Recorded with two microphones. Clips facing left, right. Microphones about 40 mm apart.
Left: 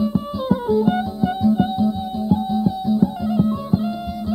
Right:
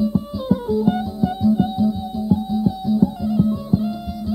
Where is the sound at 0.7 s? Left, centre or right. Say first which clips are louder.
Left 3 dB; left.